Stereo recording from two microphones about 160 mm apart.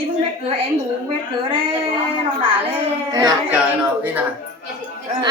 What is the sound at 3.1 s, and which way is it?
Speech, 25° right (ahead or behind).